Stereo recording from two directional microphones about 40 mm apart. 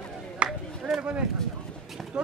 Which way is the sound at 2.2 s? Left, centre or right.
Right.